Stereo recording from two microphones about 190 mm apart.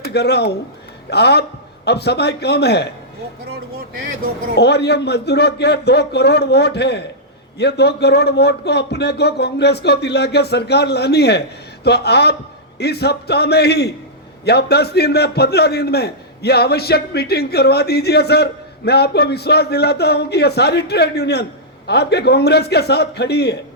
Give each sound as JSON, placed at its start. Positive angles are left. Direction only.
{"t": 0.1, "sound": "speech", "side_deg": 60}
{"t": 4.5, "sound": "speech", "side_deg": 60}